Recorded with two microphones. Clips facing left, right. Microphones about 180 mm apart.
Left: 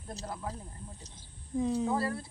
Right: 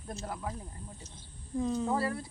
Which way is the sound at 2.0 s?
15° right (ahead or behind).